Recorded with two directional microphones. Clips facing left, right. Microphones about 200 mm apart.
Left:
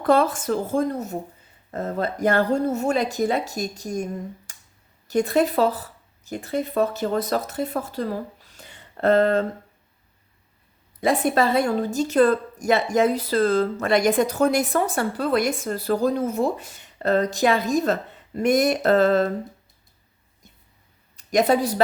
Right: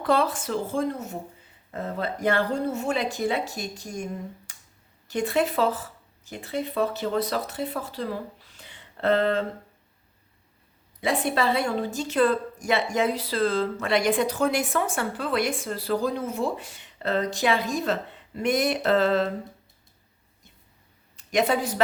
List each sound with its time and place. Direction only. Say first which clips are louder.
0.0 s speech: left 4 dB; 50° left (ahead or behind)
4.5 s a sound: left 1 dB; 40° left (ahead or behind)
5.0 s speech: left 4 dB; 40° left (ahead or behind)
11.0 s speech: left 4 dB; 45° left (ahead or behind)
21.2 s speech: left 4 dB; 40° left (ahead or behind)